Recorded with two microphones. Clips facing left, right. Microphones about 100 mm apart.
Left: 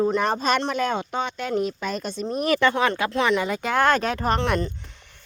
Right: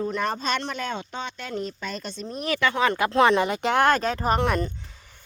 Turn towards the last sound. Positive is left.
turn(degrees=-10)  # may be behind; listen again after turning